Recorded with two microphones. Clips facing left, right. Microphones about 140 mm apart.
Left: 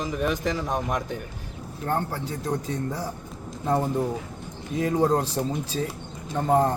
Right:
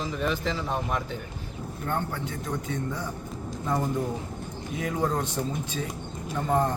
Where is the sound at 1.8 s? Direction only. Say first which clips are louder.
Left 3 dB; 35° left (ahead or behind).